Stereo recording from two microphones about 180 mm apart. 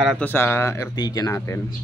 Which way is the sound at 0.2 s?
10° left (ahead or behind).